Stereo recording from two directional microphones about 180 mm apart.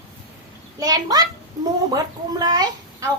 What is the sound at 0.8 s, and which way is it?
Speech, 20° right (ahead or behind).